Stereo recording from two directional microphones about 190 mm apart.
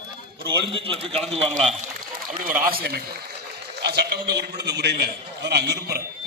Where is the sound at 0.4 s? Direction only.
25° right (ahead or behind).